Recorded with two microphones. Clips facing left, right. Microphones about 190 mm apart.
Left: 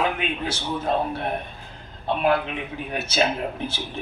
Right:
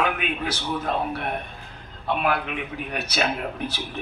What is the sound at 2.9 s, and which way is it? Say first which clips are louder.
Speech: left 3 dB; 25° left (ahead or behind).